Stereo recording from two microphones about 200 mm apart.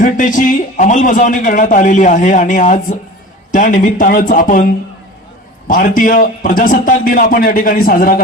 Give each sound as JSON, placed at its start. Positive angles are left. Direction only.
{"t": 0.0, "sound": "a man's voice", "side_deg": 40}